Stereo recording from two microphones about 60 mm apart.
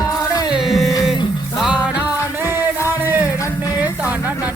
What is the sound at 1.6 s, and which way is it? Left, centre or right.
Music, centre.